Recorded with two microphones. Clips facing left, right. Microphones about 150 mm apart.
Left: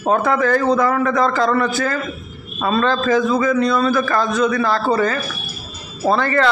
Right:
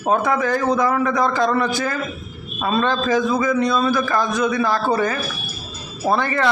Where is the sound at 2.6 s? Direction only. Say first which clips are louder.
Left 2 dB; 15° right (ahead or behind).